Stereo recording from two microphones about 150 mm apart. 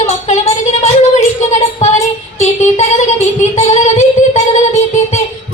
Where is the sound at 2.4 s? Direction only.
50° left (ahead or behind).